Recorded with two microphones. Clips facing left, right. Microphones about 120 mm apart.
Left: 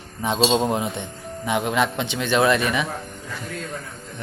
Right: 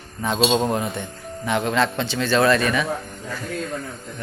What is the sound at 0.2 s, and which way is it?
A man's voice, 20° left (ahead or behind).